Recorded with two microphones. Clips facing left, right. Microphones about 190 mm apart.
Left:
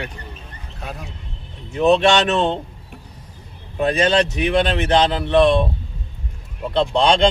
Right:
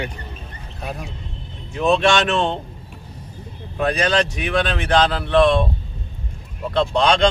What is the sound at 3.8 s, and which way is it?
Speech, 25° left (ahead or behind).